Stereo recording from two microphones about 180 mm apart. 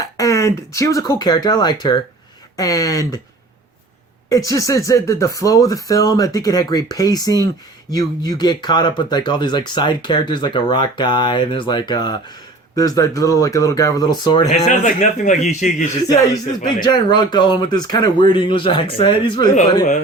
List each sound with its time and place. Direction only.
0.0 s speech: 20° left (ahead or behind)
4.3 s speech: 20° left (ahead or behind)
14.5 s a man's voice: 40° left (ahead or behind)
16.0 s speech: 20° left (ahead or behind)